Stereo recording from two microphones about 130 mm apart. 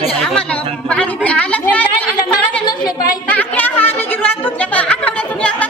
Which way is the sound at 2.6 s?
30° left (ahead or behind).